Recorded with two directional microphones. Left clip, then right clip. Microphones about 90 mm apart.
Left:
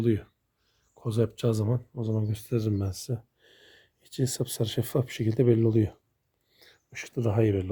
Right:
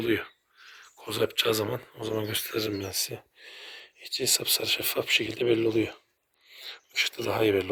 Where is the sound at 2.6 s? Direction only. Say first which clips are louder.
Right 3 dB; 35° left (ahead or behind).